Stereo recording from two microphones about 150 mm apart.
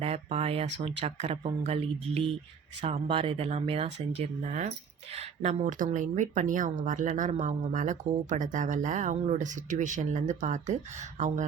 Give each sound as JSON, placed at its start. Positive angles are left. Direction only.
{"t": 0.0, "sound": "speech", "side_deg": -45}